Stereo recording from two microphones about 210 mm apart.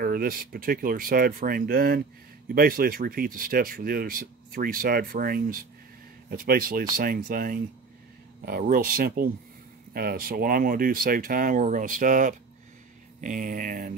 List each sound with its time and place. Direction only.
0.0 s speech: 45° right (ahead or behind)